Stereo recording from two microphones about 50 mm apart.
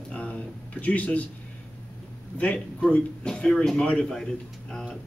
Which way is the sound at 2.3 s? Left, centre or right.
Left.